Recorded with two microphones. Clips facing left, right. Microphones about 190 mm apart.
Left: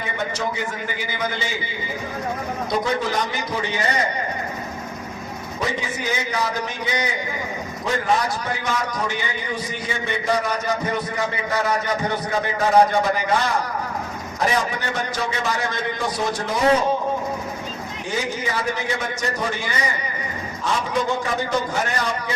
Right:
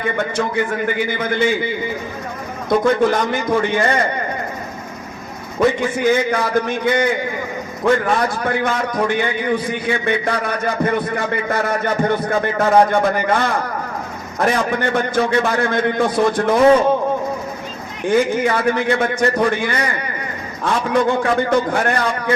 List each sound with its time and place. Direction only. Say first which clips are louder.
0.0 s a man's voice: right 6 dB; 55° right (ahead or behind)
2.6 s a man's voice: right 9 dB; 55° right (ahead or behind)
5.5 s a man's voice: right 10 dB; 55° right (ahead or behind)
18.0 s a man's voice: right 11 dB; 55° right (ahead or behind)